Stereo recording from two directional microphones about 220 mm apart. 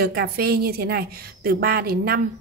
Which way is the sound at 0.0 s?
45° right (ahead or behind).